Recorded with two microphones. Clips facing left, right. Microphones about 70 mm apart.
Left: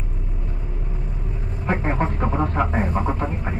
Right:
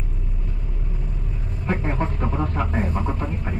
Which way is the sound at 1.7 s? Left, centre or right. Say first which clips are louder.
Left 2 dB; left.